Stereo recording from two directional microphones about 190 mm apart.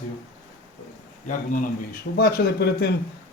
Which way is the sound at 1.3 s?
45° left (ahead or behind).